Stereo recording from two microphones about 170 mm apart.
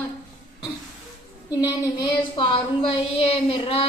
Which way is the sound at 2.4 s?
30° left (ahead or behind).